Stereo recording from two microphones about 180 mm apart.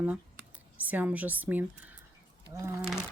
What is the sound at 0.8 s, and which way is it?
Speech, 10° right (ahead or behind).